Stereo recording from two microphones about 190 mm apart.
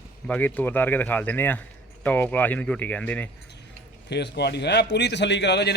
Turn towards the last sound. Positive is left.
turn(degrees=60)  # may be behind; listen again after turning